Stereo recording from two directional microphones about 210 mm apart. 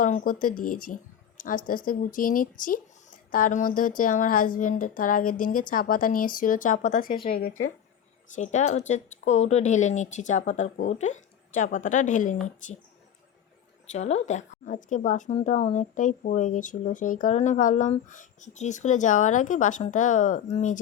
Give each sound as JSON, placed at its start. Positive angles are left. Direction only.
{"t": 0.0, "sound": "a woman's voice", "side_deg": 40}
{"t": 8.4, "sound": "a woman's voice", "side_deg": 35}
{"t": 13.9, "sound": "a woman's voice", "side_deg": 35}